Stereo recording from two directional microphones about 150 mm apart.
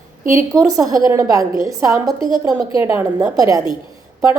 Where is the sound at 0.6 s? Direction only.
25° right (ahead or behind).